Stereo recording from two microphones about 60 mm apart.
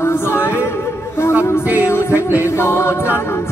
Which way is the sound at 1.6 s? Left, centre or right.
Right.